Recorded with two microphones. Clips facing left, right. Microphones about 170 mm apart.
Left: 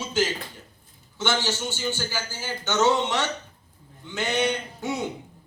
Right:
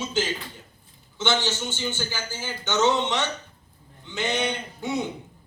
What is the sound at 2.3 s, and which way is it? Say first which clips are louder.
Speech: left 1 dB; 15° right (ahead or behind).